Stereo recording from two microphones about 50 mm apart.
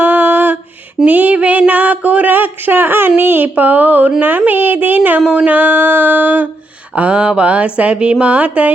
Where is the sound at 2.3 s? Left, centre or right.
Right.